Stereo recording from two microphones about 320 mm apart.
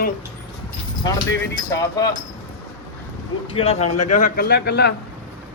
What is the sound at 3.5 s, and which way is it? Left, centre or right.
A man's voice, centre.